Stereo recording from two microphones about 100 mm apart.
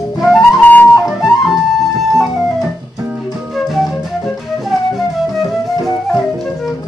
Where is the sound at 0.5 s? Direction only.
15° left (ahead or behind).